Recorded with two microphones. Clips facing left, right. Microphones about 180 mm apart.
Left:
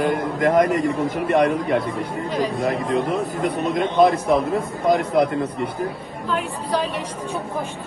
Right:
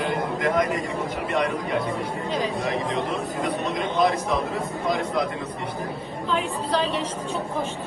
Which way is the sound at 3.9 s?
60° left (ahead or behind).